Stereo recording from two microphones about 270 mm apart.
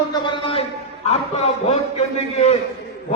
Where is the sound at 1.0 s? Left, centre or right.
Left.